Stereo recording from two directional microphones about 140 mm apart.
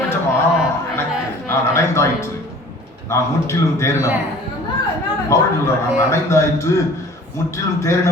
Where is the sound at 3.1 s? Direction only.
20° left (ahead or behind).